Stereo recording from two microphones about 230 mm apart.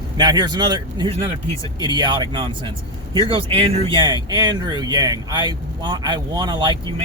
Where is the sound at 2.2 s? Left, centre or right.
Right.